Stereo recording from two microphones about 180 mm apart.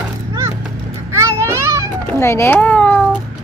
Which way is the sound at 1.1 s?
15° right (ahead or behind).